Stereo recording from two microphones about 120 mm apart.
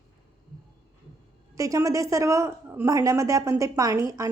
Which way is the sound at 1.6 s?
25° right (ahead or behind).